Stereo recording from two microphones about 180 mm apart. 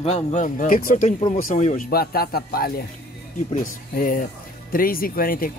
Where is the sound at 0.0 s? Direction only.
40° left (ahead or behind).